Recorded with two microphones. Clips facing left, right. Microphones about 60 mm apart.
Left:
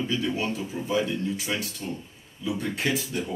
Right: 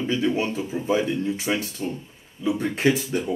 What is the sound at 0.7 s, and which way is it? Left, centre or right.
Speech, centre.